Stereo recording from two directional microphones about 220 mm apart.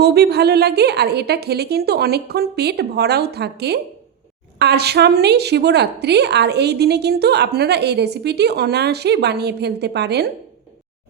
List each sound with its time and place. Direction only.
0.0 s a woman's voice: 45° right (ahead or behind)